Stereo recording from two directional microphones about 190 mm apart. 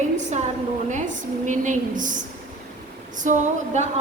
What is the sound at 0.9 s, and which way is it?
A woman's voice, 40° right (ahead or behind).